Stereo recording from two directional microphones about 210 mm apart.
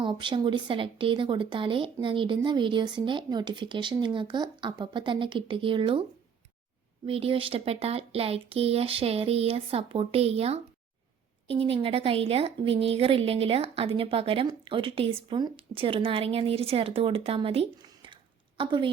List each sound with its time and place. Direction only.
0.0 s a woman's voice: 20° right (ahead or behind)